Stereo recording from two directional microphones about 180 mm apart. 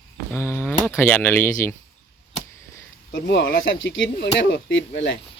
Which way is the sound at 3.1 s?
85° left.